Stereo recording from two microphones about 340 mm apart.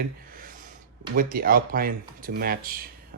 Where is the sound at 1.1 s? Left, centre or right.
Right.